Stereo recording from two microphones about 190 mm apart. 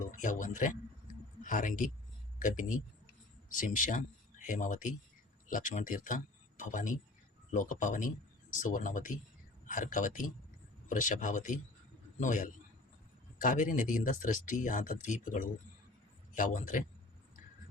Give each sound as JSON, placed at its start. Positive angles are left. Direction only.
{"t": 0.2, "sound": "speech", "side_deg": 40}